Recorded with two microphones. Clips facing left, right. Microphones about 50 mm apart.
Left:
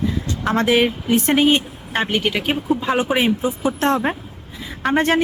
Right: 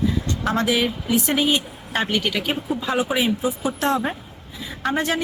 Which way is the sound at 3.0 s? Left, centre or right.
Left.